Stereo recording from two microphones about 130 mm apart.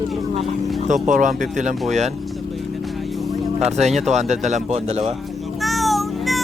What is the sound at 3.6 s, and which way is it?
Speech, 60° right (ahead or behind).